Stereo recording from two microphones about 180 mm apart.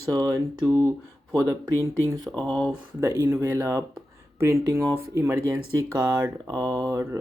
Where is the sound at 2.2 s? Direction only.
5° left (ahead or behind).